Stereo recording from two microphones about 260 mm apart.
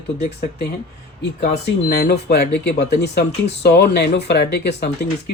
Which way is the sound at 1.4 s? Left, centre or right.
Left.